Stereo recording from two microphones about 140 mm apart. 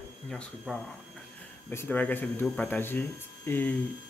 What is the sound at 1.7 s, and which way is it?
Speech, 15° left (ahead or behind).